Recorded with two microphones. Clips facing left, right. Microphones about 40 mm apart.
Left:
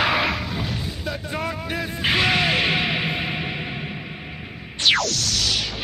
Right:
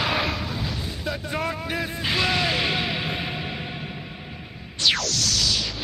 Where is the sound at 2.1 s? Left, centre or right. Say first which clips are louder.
Left 4 dB; left.